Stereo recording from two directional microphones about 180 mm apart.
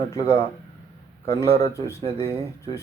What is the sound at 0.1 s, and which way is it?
Speech, 15° left (ahead or behind).